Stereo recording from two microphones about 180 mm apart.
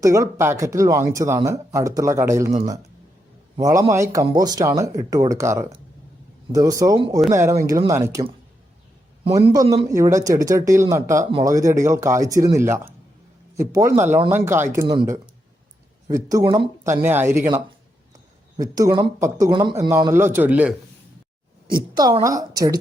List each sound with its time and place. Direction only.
0.0 s speech: 15° right (ahead or behind)
3.6 s a man's voice: 15° right (ahead or behind)
9.5 s a man's voice: 20° right (ahead or behind)
21.7 s a man's voice: 25° right (ahead or behind)